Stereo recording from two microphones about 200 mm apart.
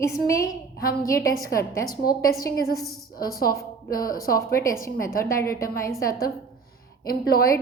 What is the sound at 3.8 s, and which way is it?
Speech, 45° left (ahead or behind).